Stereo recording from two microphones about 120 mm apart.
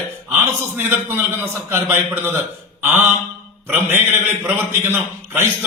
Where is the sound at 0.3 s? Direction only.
15° right (ahead or behind).